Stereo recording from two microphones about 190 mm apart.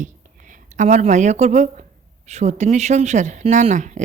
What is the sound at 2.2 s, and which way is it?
Speech, 35° right (ahead or behind).